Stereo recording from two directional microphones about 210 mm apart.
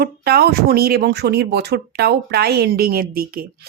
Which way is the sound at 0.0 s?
50° right (ahead or behind).